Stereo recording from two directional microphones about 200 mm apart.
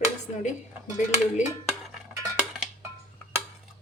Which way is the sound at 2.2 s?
15° right (ahead or behind).